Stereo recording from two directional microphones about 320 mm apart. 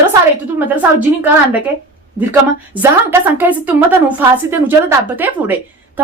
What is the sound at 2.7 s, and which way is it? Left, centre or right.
A woman's voice, centre.